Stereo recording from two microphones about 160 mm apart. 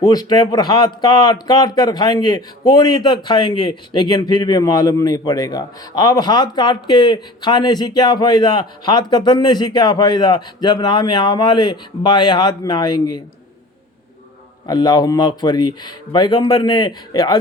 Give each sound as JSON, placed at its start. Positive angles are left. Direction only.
{"t": 0.0, "sound": "a man's voice", "side_deg": 25}
{"t": 14.7, "sound": "a man's voice", "side_deg": 25}